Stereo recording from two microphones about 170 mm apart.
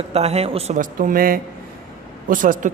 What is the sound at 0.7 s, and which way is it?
Speech, 55° right (ahead or behind).